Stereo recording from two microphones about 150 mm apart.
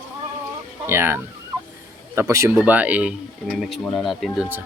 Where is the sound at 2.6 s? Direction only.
10° right (ahead or behind).